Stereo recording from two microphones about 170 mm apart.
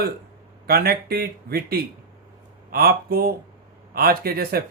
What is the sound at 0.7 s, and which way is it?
Speech, 65° right (ahead or behind).